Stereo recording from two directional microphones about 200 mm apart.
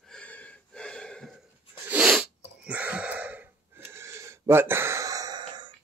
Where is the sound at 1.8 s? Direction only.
5° right (ahead or behind).